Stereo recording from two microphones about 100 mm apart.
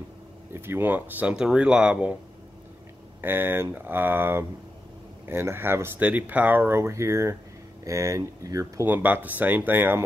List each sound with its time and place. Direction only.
0.5 s speech: 25° right (ahead or behind)
3.2 s speech: 20° right (ahead or behind)
8.8 s speech: 15° right (ahead or behind)